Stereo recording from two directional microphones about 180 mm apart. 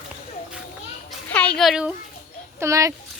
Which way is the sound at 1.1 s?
5° left (ahead or behind).